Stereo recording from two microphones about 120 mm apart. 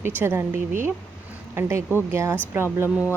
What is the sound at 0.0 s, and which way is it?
Speech, 20° right (ahead or behind).